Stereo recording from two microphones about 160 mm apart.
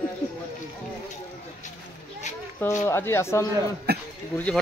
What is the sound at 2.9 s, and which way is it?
Speech, 15° left (ahead or behind).